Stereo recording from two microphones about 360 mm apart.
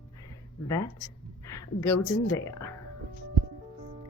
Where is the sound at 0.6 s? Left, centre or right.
Centre.